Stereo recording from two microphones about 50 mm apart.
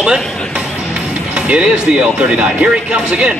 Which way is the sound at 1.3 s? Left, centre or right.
Right.